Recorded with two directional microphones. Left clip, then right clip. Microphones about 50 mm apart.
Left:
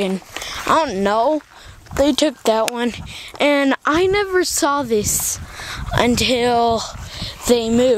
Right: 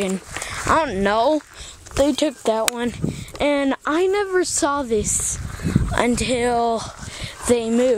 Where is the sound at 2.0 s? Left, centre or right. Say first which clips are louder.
Left 3 dB; left.